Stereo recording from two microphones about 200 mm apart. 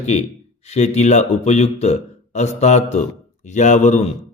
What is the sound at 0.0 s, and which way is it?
Speech, 35° left (ahead or behind).